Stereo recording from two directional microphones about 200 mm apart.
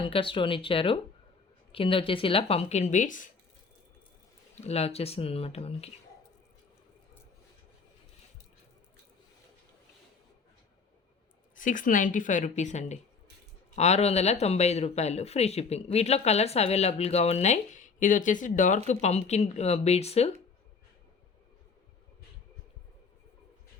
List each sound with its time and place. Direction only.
0.0 s speech: 25° left (ahead or behind)
4.6 s speech: 30° left (ahead or behind)
11.5 s speech: 40° left (ahead or behind)